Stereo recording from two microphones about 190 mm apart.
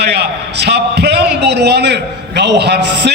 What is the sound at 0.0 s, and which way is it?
A man's voice, 60° right (ahead or behind).